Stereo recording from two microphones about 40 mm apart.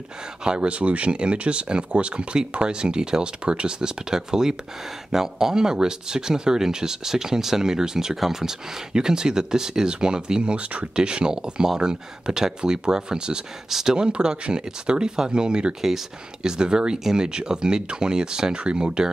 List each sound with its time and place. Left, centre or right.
0.4 s speech: right
13.7 s speech: centre
13.9 s speech: right